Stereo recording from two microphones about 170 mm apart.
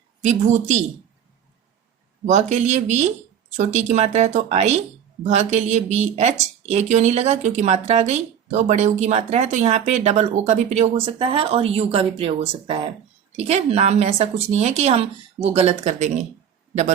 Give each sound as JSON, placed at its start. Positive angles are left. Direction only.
{"t": 0.2, "sound": "speech", "side_deg": -45}
{"t": 2.2, "sound": "speech", "side_deg": -45}